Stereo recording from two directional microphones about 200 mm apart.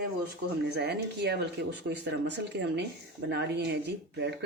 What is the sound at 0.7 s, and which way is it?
Speech, 55° right (ahead or behind).